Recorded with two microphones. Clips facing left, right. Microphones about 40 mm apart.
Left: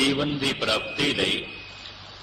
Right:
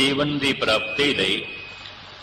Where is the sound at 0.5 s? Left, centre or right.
Right.